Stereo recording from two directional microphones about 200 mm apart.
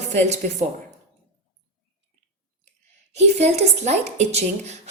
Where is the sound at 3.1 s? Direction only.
35° right (ahead or behind).